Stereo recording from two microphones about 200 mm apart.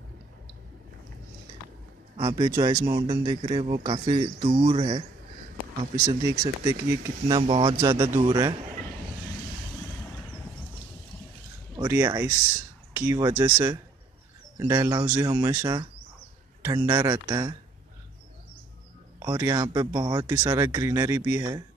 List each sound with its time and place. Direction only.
2.1 s speech: 20° right (ahead or behind)
11.7 s speech: 15° right (ahead or behind)
14.6 s speech: 20° right (ahead or behind)
19.3 s speech: 15° right (ahead or behind)